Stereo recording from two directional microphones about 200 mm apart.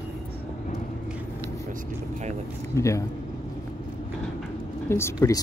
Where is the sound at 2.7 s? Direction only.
15° left (ahead or behind).